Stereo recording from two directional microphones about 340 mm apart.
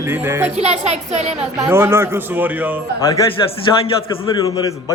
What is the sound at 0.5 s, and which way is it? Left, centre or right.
Speech, centre.